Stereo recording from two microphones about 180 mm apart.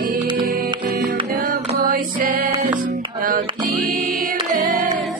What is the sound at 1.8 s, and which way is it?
Music, 50° right (ahead or behind).